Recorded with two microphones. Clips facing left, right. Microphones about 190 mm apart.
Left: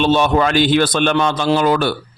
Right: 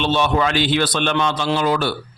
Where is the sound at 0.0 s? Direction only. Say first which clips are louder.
Left 4 dB; 45° left (ahead or behind).